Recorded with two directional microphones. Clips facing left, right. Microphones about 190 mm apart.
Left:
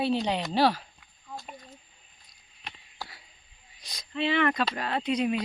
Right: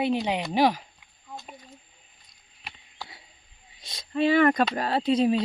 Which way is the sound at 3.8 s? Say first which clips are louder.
Right 2 dB; 25° right (ahead or behind).